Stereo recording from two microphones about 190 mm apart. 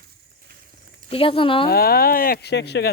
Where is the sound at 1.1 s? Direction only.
30° left (ahead or behind).